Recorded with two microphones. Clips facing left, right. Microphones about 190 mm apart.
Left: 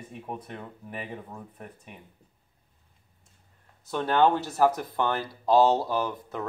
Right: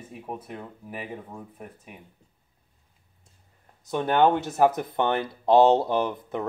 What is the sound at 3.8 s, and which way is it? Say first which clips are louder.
Speech: right 2 dB; 20° right (ahead or behind).